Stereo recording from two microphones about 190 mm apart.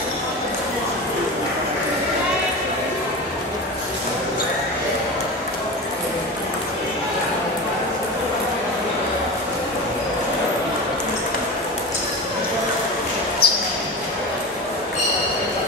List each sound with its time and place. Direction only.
13.4 s basketball bounce: 55° left (ahead or behind)